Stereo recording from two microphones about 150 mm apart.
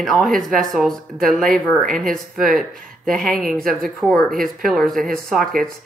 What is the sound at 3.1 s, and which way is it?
Speech, centre (ahead or behind).